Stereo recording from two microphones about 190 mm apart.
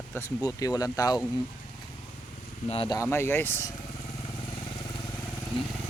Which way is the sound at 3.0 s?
15° left (ahead or behind).